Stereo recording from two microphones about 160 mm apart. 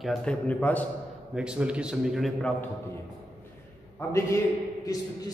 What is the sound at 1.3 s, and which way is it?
A man's voice, 5° right (ahead or behind).